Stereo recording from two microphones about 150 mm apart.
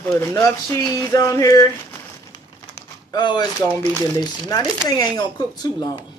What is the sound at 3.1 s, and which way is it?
Speech, 30° left (ahead or behind).